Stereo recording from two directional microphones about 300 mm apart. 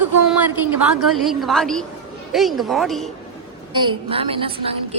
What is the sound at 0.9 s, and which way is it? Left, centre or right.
A woman's voice, centre.